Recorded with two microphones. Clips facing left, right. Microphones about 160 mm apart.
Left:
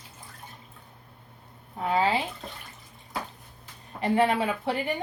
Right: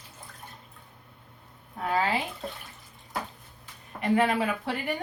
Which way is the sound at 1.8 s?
25° left (ahead or behind).